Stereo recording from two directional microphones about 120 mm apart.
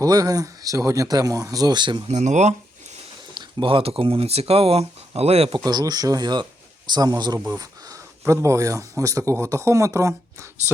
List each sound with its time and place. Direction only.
0.0 s speech: 30° right (ahead or behind)
2.0 s speech: 80° right
3.3 s speech: 45° right (ahead or behind)
5.6 s speech: 30° right (ahead or behind)
7.3 s speech: 20° right (ahead or behind)